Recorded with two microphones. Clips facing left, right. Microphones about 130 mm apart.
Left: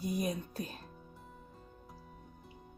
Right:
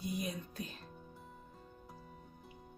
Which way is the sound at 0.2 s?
45° left (ahead or behind).